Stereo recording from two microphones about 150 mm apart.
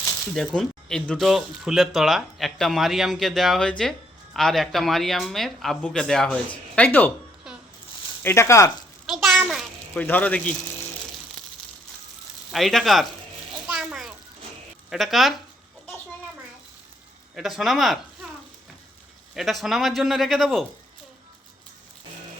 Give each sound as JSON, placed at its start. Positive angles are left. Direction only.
{"t": 0.3, "sound": "speech", "side_deg": 5}
{"t": 8.2, "sound": "speech", "side_deg": 15}
{"t": 9.0, "sound": "a sound", "side_deg": 0}
{"t": 9.9, "sound": "speech", "side_deg": 10}
{"t": 12.5, "sound": "speech", "side_deg": 0}
{"t": 13.7, "sound": "bathtub", "side_deg": -5}
{"t": 14.8, "sound": "speech", "side_deg": 0}
{"t": 17.3, "sound": "speech", "side_deg": 0}
{"t": 19.3, "sound": "speech", "side_deg": 0}